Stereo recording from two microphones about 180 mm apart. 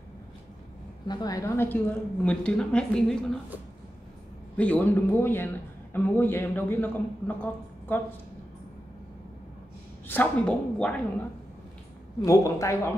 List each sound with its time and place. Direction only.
1.0 s a woman's voice: 20° left (ahead or behind); by 3.3 s 5° left (ahead or behind)
4.6 s a man's voice: 10° left (ahead or behind)
10.0 s a man's voice: 10° left (ahead or behind)
12.2 s a man's voice: 15° left (ahead or behind)